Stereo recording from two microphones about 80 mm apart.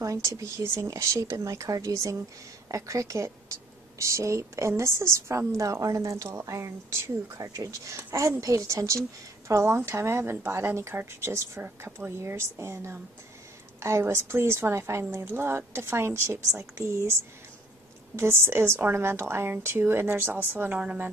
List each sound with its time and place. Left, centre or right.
0.0 s a woman's voice: right; by 21.1 s centre